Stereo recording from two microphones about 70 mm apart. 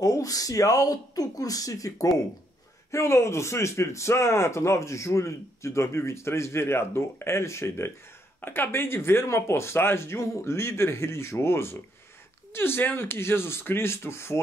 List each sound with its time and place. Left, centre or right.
0.0 s speech: left
2.9 s speech: left